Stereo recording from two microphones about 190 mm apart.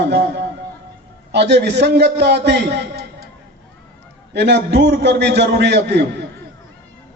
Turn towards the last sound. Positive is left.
turn(degrees=-65)  # may be behind; listen again after turning